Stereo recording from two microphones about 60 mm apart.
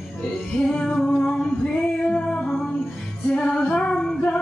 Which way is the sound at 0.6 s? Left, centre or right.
Centre.